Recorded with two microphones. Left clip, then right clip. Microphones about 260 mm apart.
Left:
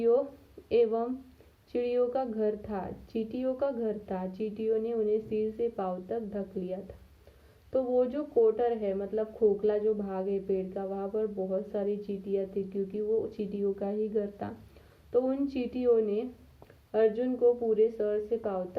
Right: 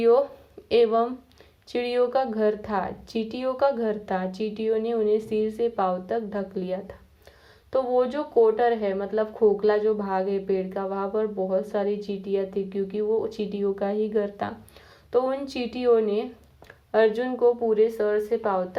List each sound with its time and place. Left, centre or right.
0.7 s a woman's voice: centre